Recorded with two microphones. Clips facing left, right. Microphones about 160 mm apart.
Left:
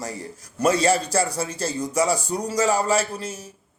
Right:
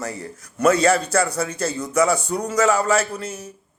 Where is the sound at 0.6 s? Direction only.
30° left (ahead or behind).